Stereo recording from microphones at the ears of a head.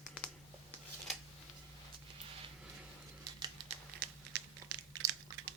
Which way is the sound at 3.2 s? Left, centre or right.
Right.